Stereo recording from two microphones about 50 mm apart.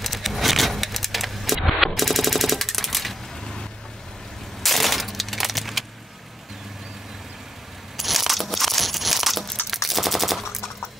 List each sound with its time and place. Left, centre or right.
0.0 s keys jangling: centre
4.6 s a sound: centre
8.0 s coin: centre
9.8 s machine gun: centre